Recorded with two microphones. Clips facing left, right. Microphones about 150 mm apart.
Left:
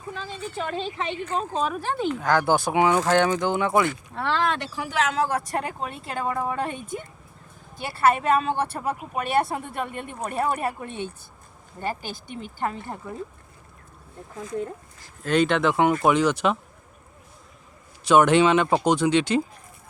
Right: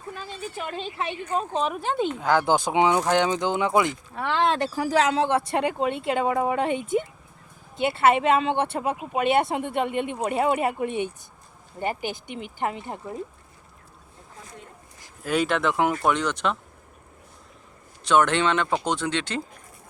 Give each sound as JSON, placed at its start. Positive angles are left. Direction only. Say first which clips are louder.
{"t": 0.1, "sound": "speech", "louder": "left 1 dB", "side_deg": -10}
{"t": 1.6, "sound": "speech", "louder": "even", "side_deg": -20}
{"t": 4.4, "sound": "speech", "louder": "right 4 dB", "side_deg": -40}
{"t": 15.0, "sound": "speech", "louder": "left 3 dB", "side_deg": -5}
{"t": 18.0, "sound": "speech", "louder": "left 4 dB", "side_deg": 10}